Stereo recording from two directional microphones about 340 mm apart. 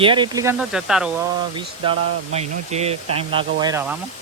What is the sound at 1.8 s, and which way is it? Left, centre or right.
Speech, centre.